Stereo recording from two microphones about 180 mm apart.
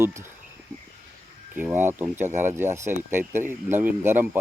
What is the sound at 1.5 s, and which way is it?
Speech, 10° right (ahead or behind).